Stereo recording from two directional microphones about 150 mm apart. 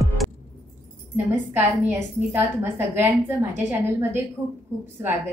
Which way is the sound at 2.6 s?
15° right (ahead or behind).